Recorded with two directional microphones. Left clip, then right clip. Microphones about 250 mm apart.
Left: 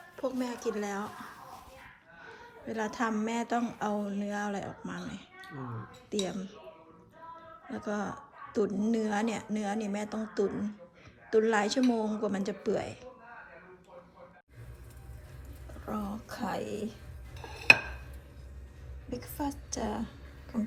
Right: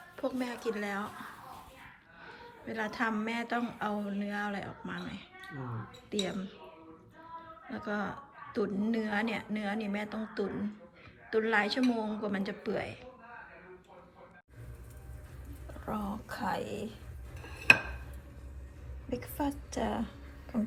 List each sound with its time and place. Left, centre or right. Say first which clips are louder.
0.2 s speech: left 1 dB; centre
2.4 s speech: left 2 dB; centre
6.2 s speech: left 1 dB; centre
7.7 s speech: left 1 dB; centre
15.9 s speech: even; centre
17.3 s dishes: left 2 dB; centre
19.1 s a sound: right 1 dB; centre